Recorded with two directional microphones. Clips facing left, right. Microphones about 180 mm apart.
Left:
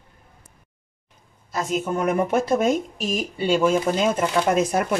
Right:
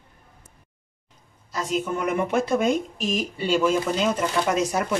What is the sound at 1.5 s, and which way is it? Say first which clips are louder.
Speech: left 2 dB; 45° left (ahead or behind).